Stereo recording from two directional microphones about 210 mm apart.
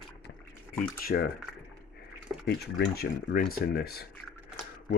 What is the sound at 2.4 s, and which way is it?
Speech, 50° left (ahead or behind).